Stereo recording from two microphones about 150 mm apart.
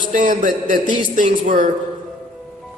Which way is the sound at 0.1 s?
60° right (ahead or behind).